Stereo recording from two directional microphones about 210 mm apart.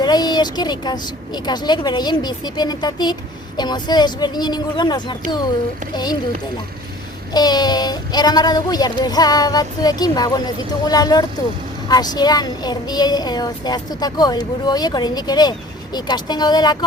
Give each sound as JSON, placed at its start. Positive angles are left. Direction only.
{"t": 0.0, "sound": "speech", "side_deg": 20}
{"t": 7.3, "sound": "speech", "side_deg": 20}